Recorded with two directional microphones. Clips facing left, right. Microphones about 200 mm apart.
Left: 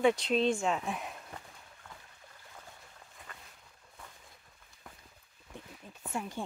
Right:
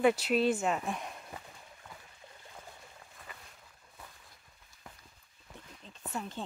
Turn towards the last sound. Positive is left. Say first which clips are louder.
# left 2 dB
turn(degrees=10)  # may be behind; listen again after turning